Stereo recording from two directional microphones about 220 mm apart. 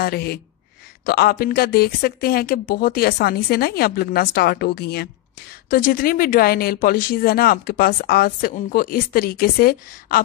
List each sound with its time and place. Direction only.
0.0 s speech: 45° left (ahead or behind)